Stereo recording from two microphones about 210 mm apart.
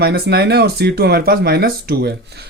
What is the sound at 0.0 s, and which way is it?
Speech, 50° right (ahead or behind).